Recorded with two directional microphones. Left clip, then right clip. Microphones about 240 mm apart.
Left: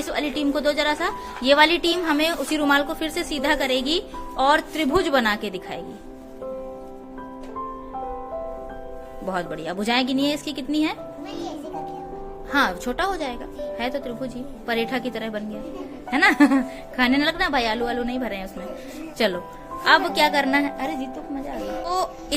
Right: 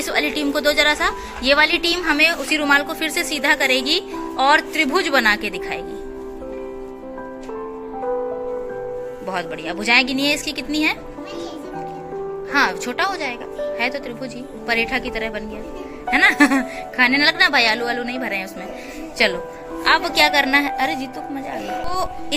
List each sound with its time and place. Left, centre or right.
0.0 s a woman's voice: centre
9.2 s a woman's voice: left
12.5 s a woman's voice: centre